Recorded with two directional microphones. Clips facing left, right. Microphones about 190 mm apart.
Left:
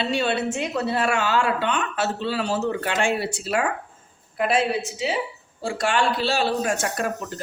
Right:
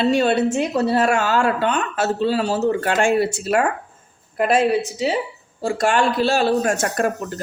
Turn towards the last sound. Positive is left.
turn(degrees=-45)  # may be behind; listen again after turning